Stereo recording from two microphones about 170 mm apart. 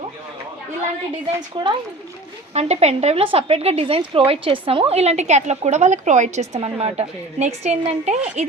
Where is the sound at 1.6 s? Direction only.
30° right (ahead or behind).